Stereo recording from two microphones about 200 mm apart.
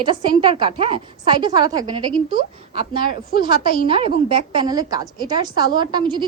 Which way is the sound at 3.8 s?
25° right (ahead or behind).